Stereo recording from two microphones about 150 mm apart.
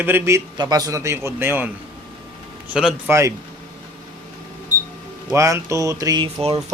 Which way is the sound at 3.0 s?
20° right (ahead or behind).